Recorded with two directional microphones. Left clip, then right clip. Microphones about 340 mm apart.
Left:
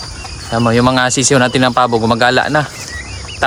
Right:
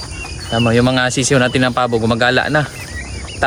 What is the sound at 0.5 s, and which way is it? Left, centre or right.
Speech, centre.